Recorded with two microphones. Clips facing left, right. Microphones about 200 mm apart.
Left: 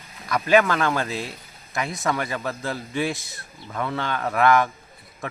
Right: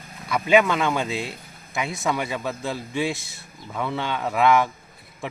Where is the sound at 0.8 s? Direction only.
10° right (ahead or behind).